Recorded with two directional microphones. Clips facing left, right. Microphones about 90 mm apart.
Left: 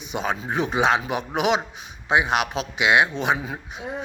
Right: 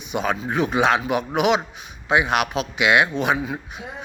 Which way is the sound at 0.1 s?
25° left (ahead or behind).